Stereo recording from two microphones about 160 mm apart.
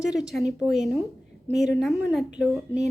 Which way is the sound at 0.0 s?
5° right (ahead or behind).